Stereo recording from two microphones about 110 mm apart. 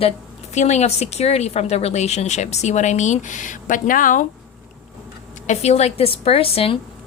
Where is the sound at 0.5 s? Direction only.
90° left.